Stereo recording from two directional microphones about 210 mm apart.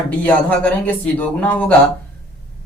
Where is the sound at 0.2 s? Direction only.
5° left (ahead or behind).